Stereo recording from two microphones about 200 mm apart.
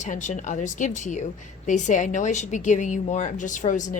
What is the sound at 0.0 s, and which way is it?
A woman's voice, 35° left (ahead or behind).